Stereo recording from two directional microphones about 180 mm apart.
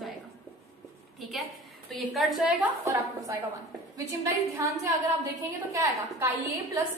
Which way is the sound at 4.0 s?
15° right (ahead or behind).